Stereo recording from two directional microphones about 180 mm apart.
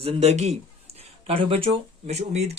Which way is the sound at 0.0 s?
35° right (ahead or behind).